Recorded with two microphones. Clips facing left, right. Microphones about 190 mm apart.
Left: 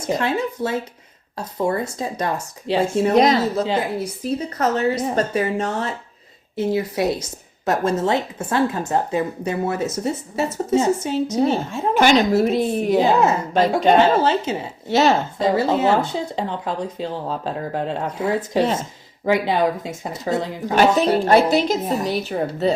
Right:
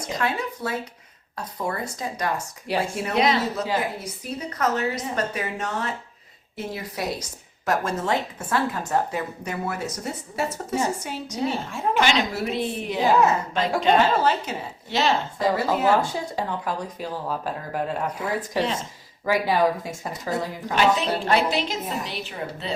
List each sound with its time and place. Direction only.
0.1 s a woman's voice: 25° left (ahead or behind)
3.1 s speech: 40° left (ahead or behind)
3.6 s a woman's voice: 30° left (ahead or behind)
11.9 s a woman's voice: 45° left (ahead or behind)
13.0 s a woman's voice: 25° left (ahead or behind)
13.5 s speech: 40° left (ahead or behind)
14.0 s a woman's voice: 25° left (ahead or behind)
14.8 s a woman's voice: 45° left (ahead or behind)
15.4 s a woman's voice: 25° left (ahead or behind)
20.7 s a woman's voice: 45° left (ahead or behind)